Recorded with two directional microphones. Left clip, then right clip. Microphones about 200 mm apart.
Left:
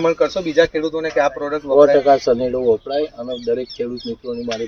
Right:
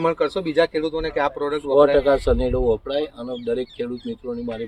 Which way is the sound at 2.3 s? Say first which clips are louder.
Left 3 dB; 30° right (ahead or behind).